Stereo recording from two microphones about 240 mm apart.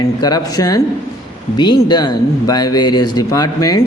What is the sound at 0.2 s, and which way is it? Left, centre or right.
A man's voice, centre.